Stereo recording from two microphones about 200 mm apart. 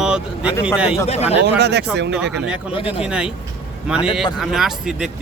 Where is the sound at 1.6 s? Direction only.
55° right (ahead or behind).